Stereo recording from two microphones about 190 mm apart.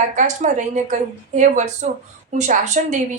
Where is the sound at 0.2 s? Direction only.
40° right (ahead or behind).